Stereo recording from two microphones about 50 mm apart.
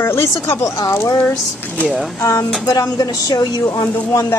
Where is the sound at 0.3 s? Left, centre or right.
Left.